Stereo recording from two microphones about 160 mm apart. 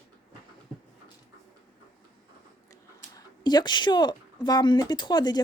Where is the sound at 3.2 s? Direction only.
25° left (ahead or behind).